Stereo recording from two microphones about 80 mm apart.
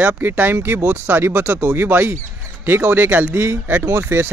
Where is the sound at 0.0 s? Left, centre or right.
Right.